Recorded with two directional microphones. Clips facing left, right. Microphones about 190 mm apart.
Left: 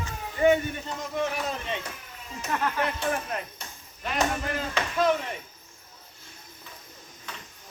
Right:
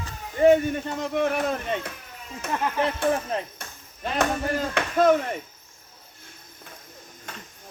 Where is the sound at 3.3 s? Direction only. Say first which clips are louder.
Right 5 dB; 30° right (ahead or behind).